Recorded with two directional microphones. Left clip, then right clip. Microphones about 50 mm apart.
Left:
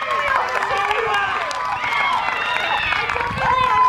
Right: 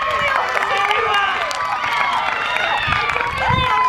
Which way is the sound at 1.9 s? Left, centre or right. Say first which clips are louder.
Even; right.